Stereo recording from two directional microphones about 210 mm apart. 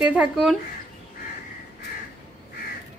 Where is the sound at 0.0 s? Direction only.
5° right (ahead or behind).